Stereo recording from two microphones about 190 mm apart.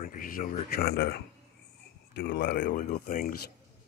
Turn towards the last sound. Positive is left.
turn(degrees=50)  # may be behind; listen again after turning